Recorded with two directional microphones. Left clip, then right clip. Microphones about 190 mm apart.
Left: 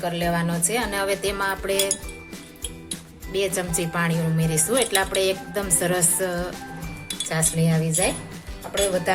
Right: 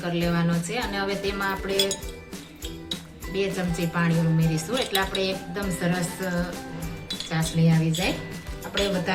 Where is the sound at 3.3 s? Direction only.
70° left (ahead or behind).